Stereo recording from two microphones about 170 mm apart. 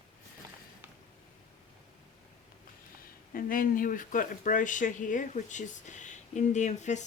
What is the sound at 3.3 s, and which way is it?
Speech, 55° left (ahead or behind).